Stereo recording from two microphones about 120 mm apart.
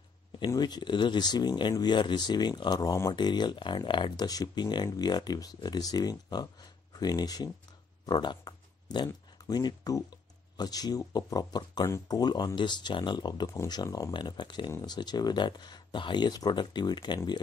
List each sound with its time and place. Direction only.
0.5 s speech: 35° left (ahead or behind)
14.1 s speech: 40° left (ahead or behind)